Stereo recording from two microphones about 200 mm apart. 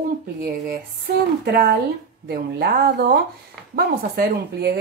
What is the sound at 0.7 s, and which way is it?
Speech, 50° right (ahead or behind).